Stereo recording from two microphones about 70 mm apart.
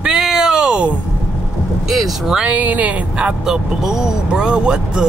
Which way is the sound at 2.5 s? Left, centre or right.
Right.